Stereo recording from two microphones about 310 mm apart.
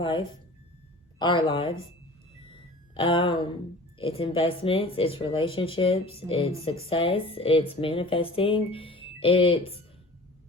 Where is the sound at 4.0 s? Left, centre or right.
Centre.